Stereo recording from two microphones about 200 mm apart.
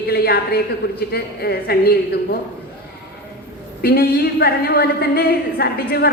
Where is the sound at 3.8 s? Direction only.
50° left (ahead or behind).